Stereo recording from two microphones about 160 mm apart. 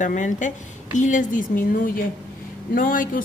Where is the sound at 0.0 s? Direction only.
50° left (ahead or behind).